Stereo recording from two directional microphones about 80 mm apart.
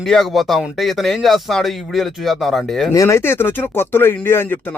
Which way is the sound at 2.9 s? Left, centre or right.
Left.